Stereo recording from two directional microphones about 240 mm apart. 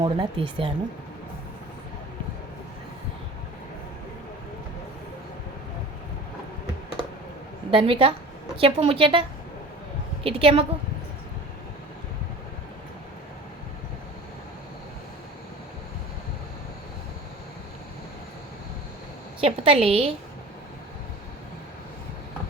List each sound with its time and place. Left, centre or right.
0.0 s a woman's voice: centre
7.7 s a woman's voice: right
10.2 s a woman's voice: right
19.4 s a woman's voice: right